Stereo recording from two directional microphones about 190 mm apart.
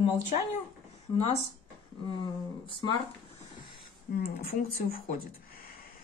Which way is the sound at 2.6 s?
25° left (ahead or behind).